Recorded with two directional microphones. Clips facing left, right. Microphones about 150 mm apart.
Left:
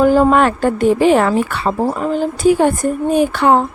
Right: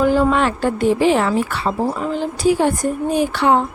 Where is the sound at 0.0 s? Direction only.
45° left (ahead or behind).